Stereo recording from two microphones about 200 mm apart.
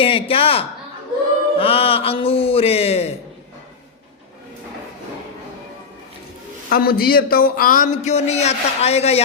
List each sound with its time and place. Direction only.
0.0 s speech: 30° left (ahead or behind)
6.7 s a man's voice: 50° left (ahead or behind); by 9.2 s 30° left (ahead or behind)